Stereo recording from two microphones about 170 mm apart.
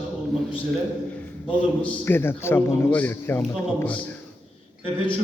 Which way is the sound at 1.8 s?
10° left (ahead or behind).